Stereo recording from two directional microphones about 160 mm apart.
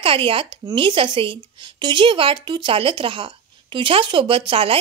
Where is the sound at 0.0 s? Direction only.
35° right (ahead or behind).